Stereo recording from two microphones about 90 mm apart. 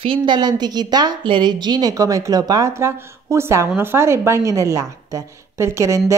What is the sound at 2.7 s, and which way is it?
A woman's voice, 30° right (ahead or behind).